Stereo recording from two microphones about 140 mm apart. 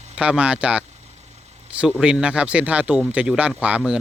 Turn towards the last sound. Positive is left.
turn(degrees=-5)  # may be behind; listen again after turning